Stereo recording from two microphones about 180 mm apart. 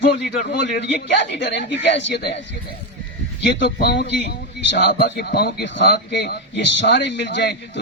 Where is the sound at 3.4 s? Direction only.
70° left (ahead or behind).